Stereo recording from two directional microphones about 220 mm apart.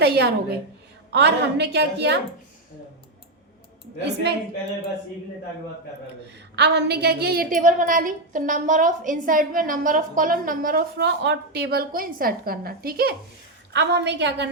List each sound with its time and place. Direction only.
0.0 s a woman's voice: 45° right (ahead or behind)
4.0 s a woman's voice: 50° right (ahead or behind)
6.6 s a woman's voice: 50° right (ahead or behind)